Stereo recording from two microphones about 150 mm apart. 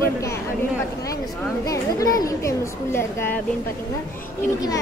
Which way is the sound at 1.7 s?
25° left (ahead or behind).